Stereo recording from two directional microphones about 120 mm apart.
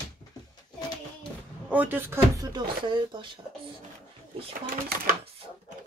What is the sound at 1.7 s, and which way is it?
Speech, 15° right (ahead or behind).